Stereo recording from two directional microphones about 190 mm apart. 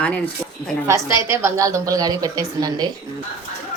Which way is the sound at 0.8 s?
15° right (ahead or behind).